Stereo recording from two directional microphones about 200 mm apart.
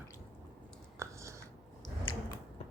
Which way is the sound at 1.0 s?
15° right (ahead or behind).